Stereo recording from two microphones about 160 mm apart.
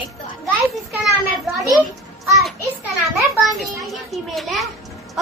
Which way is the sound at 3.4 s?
Centre (ahead or behind).